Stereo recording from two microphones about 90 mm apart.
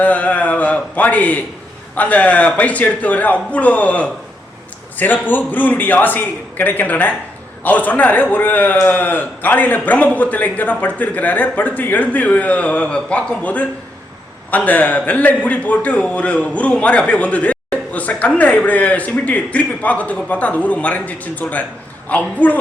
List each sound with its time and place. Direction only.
0.0 s a man's voice: 15° left (ahead or behind)